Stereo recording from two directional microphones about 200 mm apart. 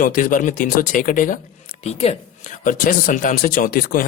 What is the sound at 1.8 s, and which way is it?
Speech, 30° left (ahead or behind).